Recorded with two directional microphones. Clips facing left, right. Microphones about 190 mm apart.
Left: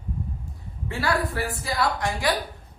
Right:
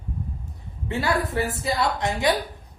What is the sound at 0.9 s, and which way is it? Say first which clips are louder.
A man's voice: right 1 dB; 20° right (ahead or behind).